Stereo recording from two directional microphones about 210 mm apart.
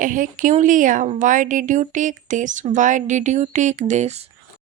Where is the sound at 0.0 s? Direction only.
40° right (ahead or behind).